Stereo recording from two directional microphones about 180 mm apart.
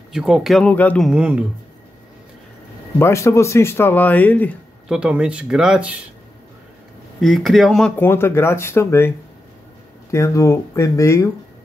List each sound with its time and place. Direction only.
0.1 s speech: 5° right (ahead or behind)
3.0 s speech: 15° left (ahead or behind)
4.8 s speech: 5° right (ahead or behind)
7.2 s speech: centre (ahead or behind)
10.1 s speech: 15° left (ahead or behind)